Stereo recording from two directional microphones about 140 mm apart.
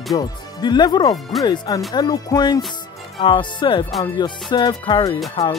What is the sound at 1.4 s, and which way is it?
Music, 30° left (ahead or behind).